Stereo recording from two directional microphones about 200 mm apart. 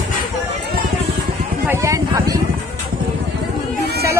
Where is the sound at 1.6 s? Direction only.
15° right (ahead or behind).